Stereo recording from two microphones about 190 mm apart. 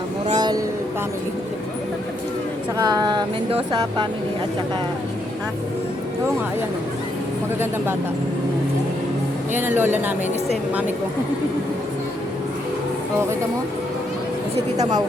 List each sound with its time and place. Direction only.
0.3 s a sound: 20° right (ahead or behind)
2.7 s speech: 20° right (ahead or behind)
9.5 s speech: 10° right (ahead or behind)